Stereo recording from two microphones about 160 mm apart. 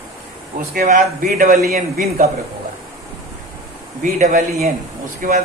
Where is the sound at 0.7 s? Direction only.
60° right (ahead or behind).